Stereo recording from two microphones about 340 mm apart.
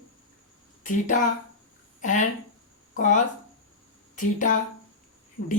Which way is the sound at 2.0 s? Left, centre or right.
Left.